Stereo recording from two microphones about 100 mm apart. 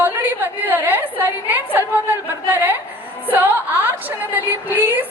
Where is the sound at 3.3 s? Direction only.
20° right (ahead or behind).